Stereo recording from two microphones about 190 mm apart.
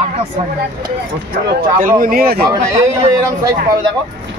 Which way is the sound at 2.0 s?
50° right (ahead or behind).